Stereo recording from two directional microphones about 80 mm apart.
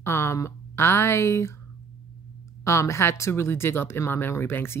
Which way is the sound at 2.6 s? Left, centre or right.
Left.